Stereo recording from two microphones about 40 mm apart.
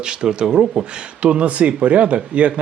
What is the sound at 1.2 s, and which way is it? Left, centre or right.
Speech, right.